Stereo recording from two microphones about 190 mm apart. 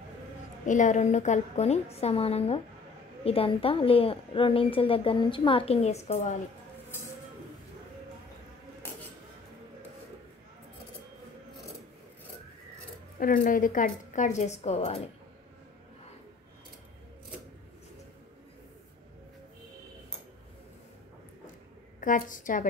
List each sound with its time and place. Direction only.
0.7 s a woman's voice: 40° left (ahead or behind)
13.2 s a woman's voice: 50° left (ahead or behind); by 15.0 s 30° left (ahead or behind)
22.0 s a woman's voice: 45° left (ahead or behind)